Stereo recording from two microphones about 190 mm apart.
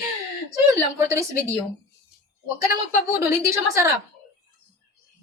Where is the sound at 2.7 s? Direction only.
50° left (ahead or behind).